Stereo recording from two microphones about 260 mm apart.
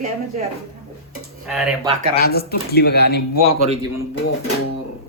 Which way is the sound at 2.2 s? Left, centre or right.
Left.